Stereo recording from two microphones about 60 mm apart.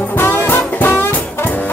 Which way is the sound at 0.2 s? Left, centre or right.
Left.